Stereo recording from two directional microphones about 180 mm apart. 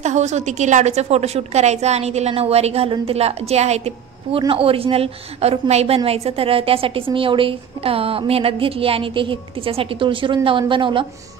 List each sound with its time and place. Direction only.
0.0 s a woman's voice: 40° right (ahead or behind)